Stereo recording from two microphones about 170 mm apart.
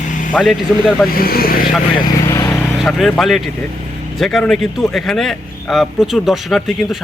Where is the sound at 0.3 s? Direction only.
Centre (ahead or behind).